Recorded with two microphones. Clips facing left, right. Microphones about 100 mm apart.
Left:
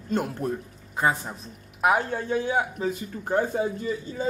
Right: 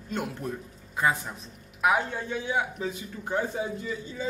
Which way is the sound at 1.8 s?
40° left (ahead or behind).